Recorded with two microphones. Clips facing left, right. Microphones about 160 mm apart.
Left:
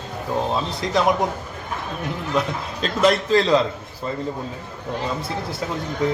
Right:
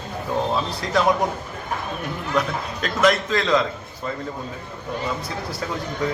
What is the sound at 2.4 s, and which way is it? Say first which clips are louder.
A man's voice: right 1 dB; 25° left (ahead or behind).